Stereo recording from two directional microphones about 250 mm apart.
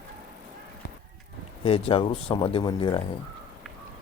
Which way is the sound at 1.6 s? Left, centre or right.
Left.